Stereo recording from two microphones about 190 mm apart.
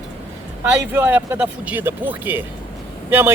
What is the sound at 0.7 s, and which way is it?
Speech, 10° right (ahead or behind).